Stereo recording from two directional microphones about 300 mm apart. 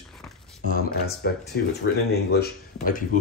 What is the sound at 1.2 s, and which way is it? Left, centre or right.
Speech, left.